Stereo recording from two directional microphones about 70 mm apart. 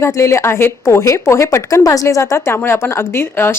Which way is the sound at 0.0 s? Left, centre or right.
Left.